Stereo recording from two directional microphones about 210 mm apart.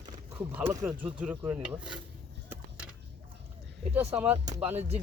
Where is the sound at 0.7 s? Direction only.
10° right (ahead or behind).